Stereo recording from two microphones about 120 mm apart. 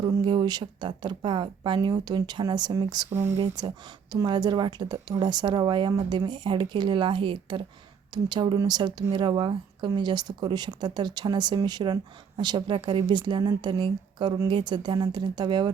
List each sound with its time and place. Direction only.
0.0 s speech: 40° right (ahead or behind)
3.1 s speech: 20° right (ahead or behind)
3.3 s speech: 40° right (ahead or behind)